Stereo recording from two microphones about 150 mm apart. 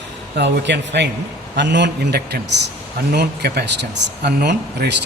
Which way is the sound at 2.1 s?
90° right.